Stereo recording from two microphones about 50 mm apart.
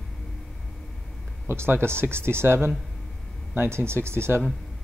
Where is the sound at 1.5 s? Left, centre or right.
Right.